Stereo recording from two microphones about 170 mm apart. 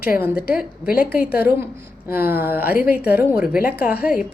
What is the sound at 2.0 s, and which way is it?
A woman's voice, 10° right (ahead or behind).